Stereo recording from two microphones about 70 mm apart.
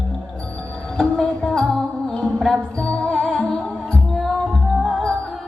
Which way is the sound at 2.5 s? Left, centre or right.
Centre.